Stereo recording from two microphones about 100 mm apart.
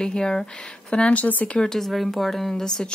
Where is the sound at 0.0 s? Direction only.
5° left (ahead or behind).